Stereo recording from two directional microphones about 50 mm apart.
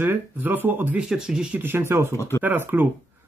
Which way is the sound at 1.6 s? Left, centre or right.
Right.